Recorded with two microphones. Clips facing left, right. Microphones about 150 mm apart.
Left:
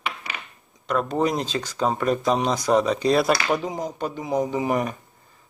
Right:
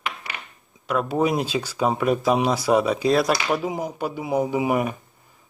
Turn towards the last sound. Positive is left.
turn(degrees=-5)  # may be behind; listen again after turning